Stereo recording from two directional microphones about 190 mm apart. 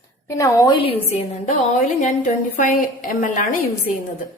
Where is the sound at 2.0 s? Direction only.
40° left (ahead or behind).